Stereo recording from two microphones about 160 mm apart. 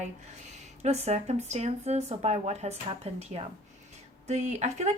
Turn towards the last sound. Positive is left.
turn(degrees=-45)  # may be behind; listen again after turning